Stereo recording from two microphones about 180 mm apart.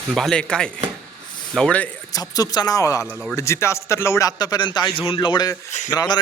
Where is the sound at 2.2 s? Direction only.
20° left (ahead or behind).